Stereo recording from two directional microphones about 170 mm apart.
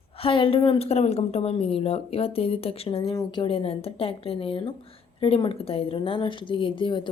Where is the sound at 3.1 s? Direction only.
25° left (ahead or behind).